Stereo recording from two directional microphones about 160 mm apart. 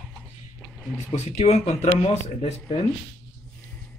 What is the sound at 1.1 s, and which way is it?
Speech, 45° left (ahead or behind).